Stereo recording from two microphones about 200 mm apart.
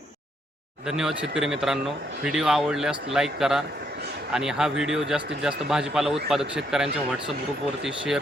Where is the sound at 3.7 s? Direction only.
50° right (ahead or behind).